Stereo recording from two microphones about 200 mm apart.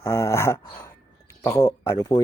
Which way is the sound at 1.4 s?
15° left (ahead or behind).